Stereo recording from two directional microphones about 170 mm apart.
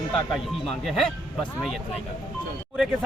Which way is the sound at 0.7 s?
Centre (ahead or behind).